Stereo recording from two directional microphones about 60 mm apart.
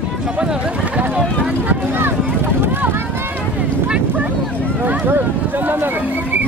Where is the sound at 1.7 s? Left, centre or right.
Right.